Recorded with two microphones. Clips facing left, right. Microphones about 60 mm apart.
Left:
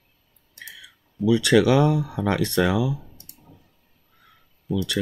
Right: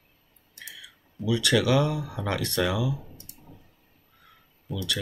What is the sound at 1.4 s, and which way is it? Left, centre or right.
Speech, left.